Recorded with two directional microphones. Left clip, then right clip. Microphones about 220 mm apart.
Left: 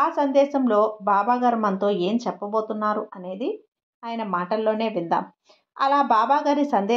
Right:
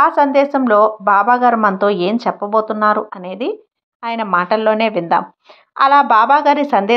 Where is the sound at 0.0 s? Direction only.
20° right (ahead or behind).